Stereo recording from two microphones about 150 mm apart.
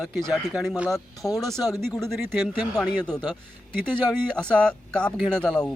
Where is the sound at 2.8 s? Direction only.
5° left (ahead or behind).